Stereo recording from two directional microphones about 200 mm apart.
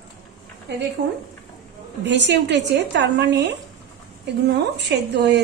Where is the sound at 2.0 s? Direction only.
60° right (ahead or behind).